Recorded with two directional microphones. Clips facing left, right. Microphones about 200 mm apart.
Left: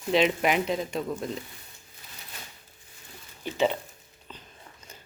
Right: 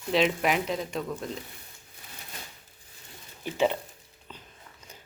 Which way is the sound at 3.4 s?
10° right (ahead or behind).